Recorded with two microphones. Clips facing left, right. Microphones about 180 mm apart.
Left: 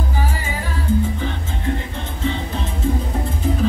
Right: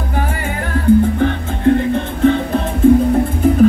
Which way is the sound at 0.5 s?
60° right (ahead or behind).